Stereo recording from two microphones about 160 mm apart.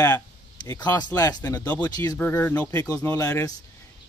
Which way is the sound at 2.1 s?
10° left (ahead or behind).